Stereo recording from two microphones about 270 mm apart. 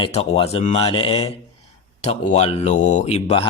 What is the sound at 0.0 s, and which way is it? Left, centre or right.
Speech, left.